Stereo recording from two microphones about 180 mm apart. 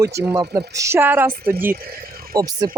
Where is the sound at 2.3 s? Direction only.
20° right (ahead or behind).